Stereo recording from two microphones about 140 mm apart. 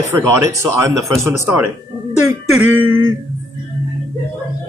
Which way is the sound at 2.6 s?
15° right (ahead or behind).